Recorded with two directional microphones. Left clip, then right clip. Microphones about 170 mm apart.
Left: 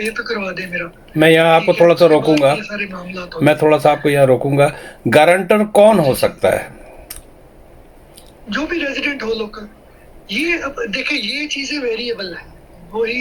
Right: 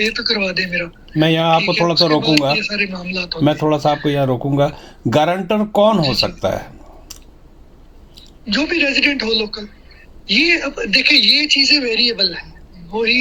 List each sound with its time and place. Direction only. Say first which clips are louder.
0.0 s speech: right 3 dB; 25° right (ahead or behind)
8.4 s speech: right 4 dB; 25° right (ahead or behind)